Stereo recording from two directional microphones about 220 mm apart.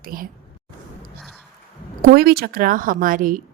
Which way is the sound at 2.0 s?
45° right (ahead or behind).